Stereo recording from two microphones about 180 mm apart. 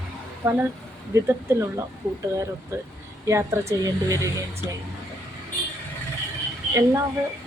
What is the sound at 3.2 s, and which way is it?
Speech, 15° right (ahead or behind).